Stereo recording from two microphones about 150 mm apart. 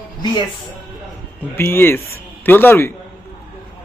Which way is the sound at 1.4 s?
15° left (ahead or behind).